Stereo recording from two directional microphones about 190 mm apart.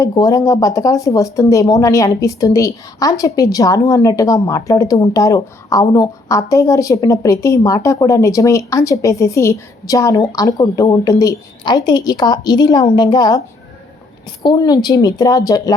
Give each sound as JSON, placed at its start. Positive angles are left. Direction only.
{"t": 0.0, "sound": "speech", "side_deg": 20}
{"t": 14.4, "sound": "speech", "side_deg": 20}